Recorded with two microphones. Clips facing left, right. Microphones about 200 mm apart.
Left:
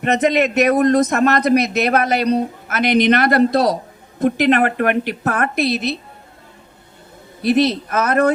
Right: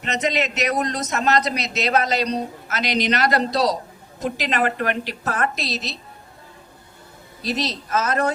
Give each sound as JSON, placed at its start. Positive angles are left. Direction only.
{"t": 0.0, "sound": "a man's voice", "side_deg": 55}
{"t": 7.4, "sound": "a man's voice", "side_deg": 60}